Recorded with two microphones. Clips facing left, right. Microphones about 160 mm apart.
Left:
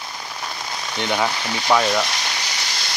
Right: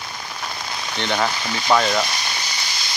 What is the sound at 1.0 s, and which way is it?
Speech, 10° left (ahead or behind).